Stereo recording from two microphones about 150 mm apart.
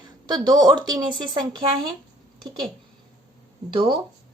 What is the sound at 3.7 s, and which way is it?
Speech, 30° right (ahead or behind).